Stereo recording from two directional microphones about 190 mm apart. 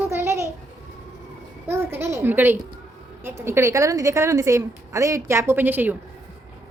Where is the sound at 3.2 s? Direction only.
15° right (ahead or behind).